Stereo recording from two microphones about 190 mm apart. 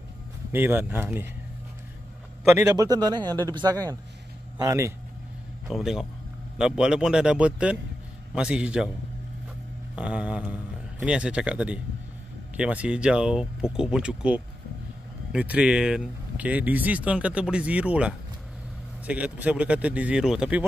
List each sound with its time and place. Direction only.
0.5 s speech: 10° right (ahead or behind)
2.6 s a man's voice: 20° right (ahead or behind)
5.7 s speech: centre (ahead or behind)
9.9 s speech: 5° right (ahead or behind)